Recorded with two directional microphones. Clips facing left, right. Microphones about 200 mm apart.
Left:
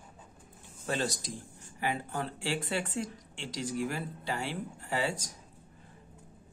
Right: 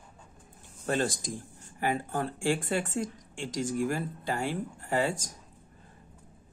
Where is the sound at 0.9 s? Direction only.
50° right (ahead or behind).